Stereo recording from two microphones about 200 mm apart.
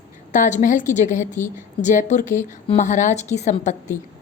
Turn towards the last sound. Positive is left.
turn(degrees=35)  # may be behind; listen again after turning